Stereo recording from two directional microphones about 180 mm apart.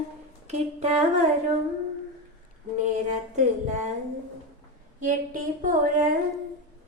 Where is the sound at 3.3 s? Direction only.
40° right (ahead or behind).